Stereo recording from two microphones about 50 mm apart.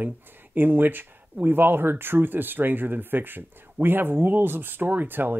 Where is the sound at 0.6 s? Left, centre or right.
Right.